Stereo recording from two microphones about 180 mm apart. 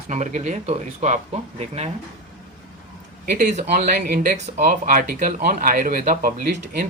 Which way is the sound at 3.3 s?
45° right (ahead or behind).